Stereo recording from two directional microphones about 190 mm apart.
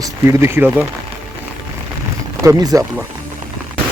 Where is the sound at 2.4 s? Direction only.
20° right (ahead or behind).